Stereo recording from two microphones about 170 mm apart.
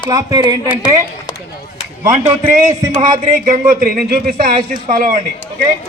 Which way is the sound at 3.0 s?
50° right (ahead or behind).